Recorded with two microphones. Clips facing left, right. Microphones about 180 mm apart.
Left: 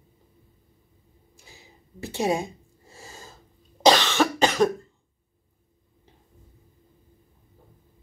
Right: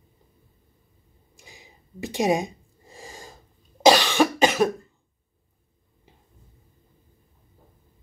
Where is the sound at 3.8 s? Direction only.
10° right (ahead or behind).